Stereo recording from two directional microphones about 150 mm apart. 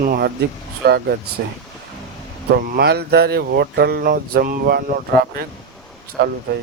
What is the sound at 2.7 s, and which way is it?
Mantra, 90° right.